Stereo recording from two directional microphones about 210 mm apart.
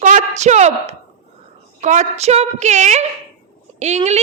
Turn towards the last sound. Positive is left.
turn(degrees=-30)  # may be behind; listen again after turning